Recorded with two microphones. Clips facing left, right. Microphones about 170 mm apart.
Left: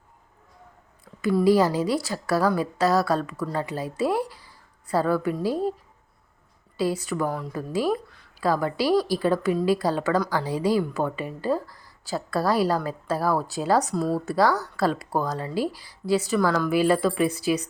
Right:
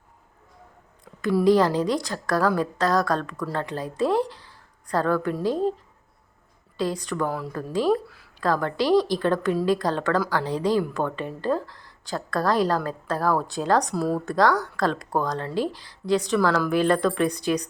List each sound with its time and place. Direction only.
1.0 s a sound: 5° left (ahead or behind)
1.5 s a woman's voice: 5° left (ahead or behind)
6.7 s a woman's voice: 5° left (ahead or behind)
8.0 s speech: 5° right (ahead or behind)
8.4 s a woman's voice: 5° left (ahead or behind)